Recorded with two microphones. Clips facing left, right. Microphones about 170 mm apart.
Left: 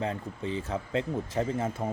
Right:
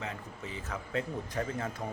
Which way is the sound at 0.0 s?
30° left (ahead or behind).